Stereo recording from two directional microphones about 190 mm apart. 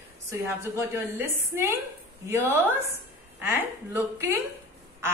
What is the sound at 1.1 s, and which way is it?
Speech, 10° right (ahead or behind).